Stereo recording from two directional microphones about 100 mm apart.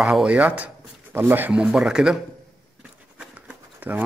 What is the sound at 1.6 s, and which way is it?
Speech, 10° right (ahead or behind).